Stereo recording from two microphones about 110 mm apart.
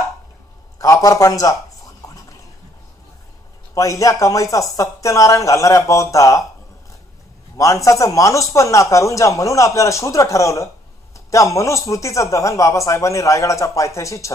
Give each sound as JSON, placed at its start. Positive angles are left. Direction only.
{"t": 0.7, "sound": "a man's voice", "side_deg": 30}
{"t": 3.7, "sound": "speech", "side_deg": 30}
{"t": 7.5, "sound": "speech", "side_deg": 30}